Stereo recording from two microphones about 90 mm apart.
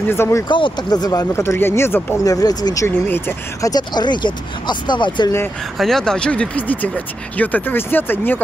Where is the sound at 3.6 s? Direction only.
50° left (ahead or behind).